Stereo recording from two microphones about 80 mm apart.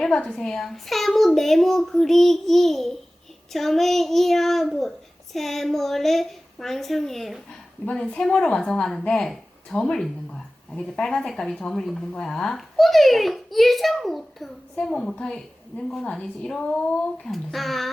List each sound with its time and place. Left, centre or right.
0.0 s speech: centre